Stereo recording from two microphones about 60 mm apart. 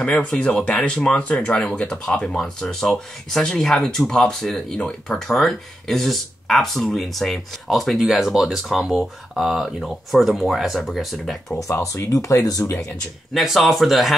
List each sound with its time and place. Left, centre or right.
0.2 s speech: centre
11.8 s speech: left
13.3 s speech: centre